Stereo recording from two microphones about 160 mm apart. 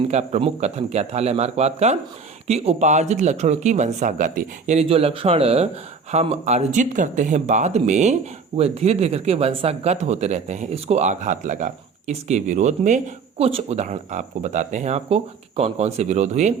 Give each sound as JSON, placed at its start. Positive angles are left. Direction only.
{"t": 0.1, "sound": "speech", "side_deg": -45}